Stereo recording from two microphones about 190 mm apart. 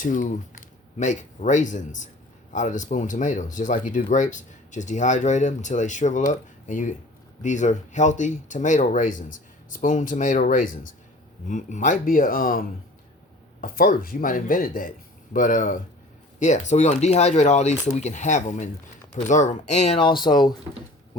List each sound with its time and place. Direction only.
0.0 s speech: 45° left (ahead or behind); by 20.5 s 20° left (ahead or behind)